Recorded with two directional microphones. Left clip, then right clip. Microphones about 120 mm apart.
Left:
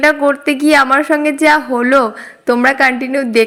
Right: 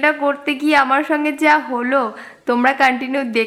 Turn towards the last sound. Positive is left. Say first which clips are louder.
# left 5 dB
turn(degrees=15)  # may be behind; listen again after turning